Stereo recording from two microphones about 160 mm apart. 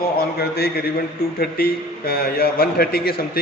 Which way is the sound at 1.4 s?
70° left (ahead or behind).